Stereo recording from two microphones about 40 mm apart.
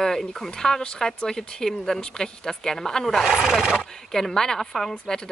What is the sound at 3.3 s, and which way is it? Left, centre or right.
Speech, centre.